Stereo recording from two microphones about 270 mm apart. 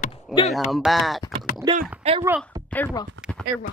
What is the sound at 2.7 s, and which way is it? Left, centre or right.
Speech, centre.